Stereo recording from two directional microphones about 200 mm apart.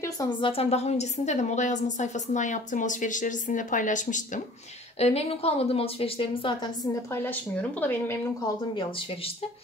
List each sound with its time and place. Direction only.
0.0 s a woman's voice: 15° left (ahead or behind)
0.5 s a woman's voice: 30° left (ahead or behind)
7.8 s a woman's voice: 10° left (ahead or behind)